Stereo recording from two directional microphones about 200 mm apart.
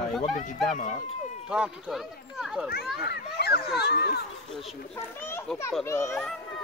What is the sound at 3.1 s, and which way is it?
Speech, 55° left (ahead or behind).